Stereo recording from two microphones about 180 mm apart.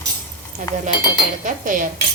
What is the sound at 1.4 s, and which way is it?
Speech, 45° right (ahead or behind).